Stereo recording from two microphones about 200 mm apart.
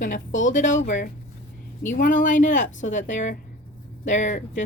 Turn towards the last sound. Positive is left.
turn(degrees=40)  # may be behind; listen again after turning